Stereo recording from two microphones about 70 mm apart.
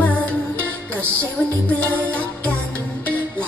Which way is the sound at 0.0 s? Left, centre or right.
Left.